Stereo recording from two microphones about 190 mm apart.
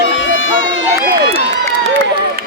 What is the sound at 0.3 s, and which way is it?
Run, 90° left.